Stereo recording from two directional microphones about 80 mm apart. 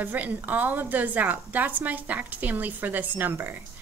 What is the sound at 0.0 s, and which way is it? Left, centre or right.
A woman's voice, right.